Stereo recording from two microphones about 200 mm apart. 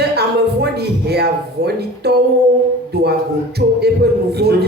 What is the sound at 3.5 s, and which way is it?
Speech, 55° right (ahead or behind).